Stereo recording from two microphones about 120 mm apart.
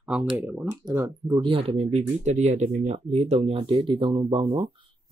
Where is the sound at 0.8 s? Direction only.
35° right (ahead or behind).